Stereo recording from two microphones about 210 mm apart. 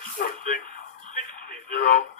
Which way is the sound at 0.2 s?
40° left (ahead or behind).